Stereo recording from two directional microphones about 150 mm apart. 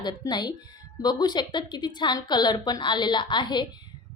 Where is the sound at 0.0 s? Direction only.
30° left (ahead or behind).